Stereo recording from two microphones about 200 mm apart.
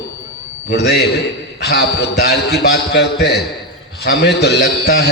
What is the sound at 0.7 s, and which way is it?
A man's voice, 55° left (ahead or behind).